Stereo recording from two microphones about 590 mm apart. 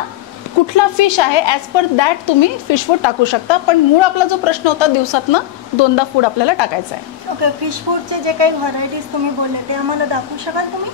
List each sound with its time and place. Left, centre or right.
0.7 s a woman's voice: left
7.7 s speech: right